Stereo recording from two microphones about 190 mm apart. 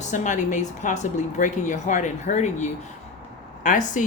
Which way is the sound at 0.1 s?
40° left (ahead or behind).